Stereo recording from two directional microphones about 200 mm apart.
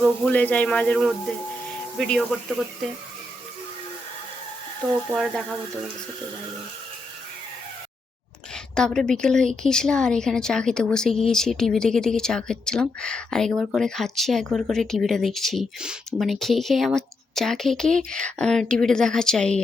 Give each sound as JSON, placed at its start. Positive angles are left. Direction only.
{"t": 0.0, "sound": "a woman's voice", "side_deg": 10}
{"t": 5.1, "sound": "a woman's voice", "side_deg": 0}
{"t": 8.5, "sound": "a woman's voice", "side_deg": 5}